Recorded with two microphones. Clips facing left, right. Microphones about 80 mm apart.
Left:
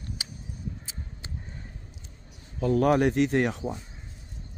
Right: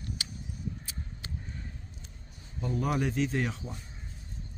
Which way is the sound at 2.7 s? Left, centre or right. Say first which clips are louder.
Left 9 dB; left.